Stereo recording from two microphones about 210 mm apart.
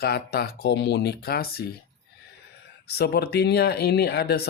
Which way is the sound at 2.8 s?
50° left (ahead or behind).